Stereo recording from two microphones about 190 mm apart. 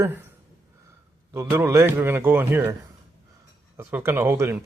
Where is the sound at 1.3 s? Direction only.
15° right (ahead or behind).